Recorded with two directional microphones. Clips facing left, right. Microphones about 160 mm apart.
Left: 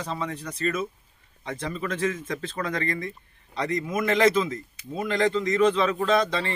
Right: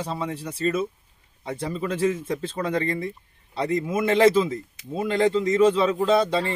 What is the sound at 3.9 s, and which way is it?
Speech, 30° right (ahead or behind).